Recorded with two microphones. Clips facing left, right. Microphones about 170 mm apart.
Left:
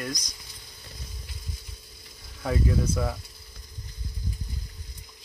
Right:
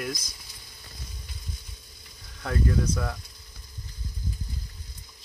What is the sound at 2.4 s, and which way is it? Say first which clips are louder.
Speech: left 1 dB; 5° left (ahead or behind).